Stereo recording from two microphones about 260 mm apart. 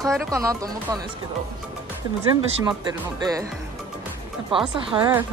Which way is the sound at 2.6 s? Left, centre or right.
Centre.